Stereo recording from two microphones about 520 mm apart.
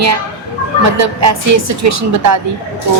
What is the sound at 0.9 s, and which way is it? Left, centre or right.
A woman's voice, right.